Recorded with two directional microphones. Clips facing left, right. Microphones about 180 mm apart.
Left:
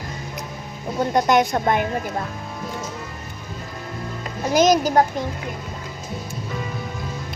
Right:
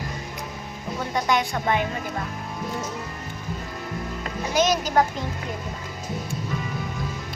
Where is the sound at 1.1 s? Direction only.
45° left (ahead or behind).